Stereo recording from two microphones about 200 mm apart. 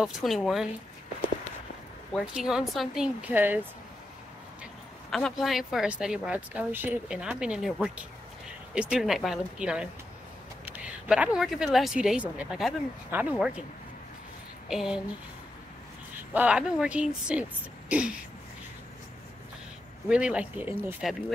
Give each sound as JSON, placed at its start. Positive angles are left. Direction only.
{"t": 0.0, "sound": "speech", "side_deg": 0}
{"t": 2.1, "sound": "speech", "side_deg": -5}
{"t": 5.1, "sound": "speech", "side_deg": 0}
{"t": 14.7, "sound": "speech", "side_deg": 0}
{"t": 16.3, "sound": "speech", "side_deg": -5}
{"t": 20.1, "sound": "speech", "side_deg": -5}